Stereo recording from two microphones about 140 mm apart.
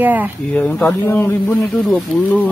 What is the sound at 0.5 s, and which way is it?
A man's voice, 10° left (ahead or behind).